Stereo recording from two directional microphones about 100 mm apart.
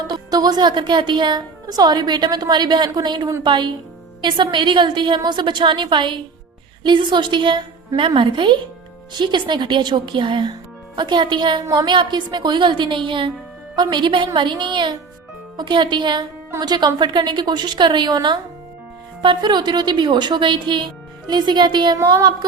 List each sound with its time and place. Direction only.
0.1 s a woman's voice: 40° right (ahead or behind)
11.6 s a woman's voice: 40° right (ahead or behind)
11.9 s a woman's voice: 50° right (ahead or behind)